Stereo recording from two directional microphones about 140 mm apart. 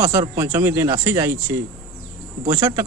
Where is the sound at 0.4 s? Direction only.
20° right (ahead or behind).